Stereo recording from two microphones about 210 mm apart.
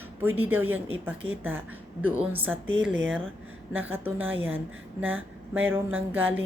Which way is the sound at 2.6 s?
65° right (ahead or behind).